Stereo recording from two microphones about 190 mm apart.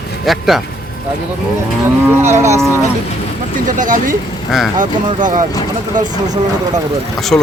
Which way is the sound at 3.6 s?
45° right (ahead or behind).